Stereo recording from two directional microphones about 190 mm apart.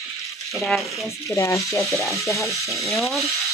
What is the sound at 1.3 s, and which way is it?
Sizzle, 15° left (ahead or behind).